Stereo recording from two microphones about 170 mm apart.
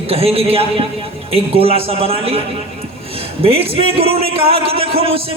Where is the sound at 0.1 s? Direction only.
35° right (ahead or behind).